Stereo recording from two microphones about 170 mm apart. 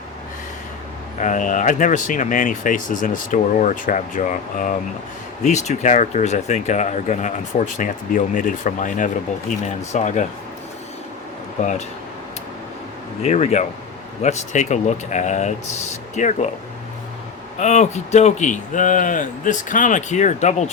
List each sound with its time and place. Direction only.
1.2 s speech: 50° left (ahead or behind)
11.6 s speech: 40° left (ahead or behind)
13.2 s speech: 40° left (ahead or behind)
17.6 s speech: 45° left (ahead or behind)